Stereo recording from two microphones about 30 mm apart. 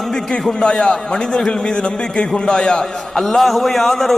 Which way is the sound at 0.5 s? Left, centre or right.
Left.